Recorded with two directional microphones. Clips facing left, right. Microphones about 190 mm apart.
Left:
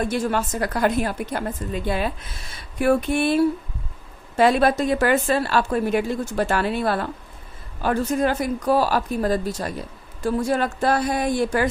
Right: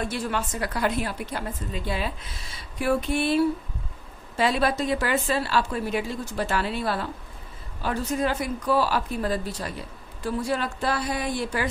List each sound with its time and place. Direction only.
0.1 s a woman's voice: 45° left (ahead or behind)